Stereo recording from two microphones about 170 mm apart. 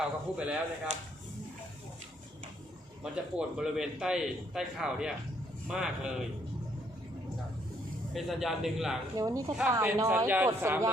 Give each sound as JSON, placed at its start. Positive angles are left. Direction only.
{"t": 0.0, "sound": "a man's voice", "side_deg": -5}
{"t": 0.9, "sound": "speech", "side_deg": -40}
{"t": 3.0, "sound": "a man's voice", "side_deg": -5}
{"t": 8.1, "sound": "a man's voice", "side_deg": 0}
{"t": 9.1, "sound": "a man's voice", "side_deg": -20}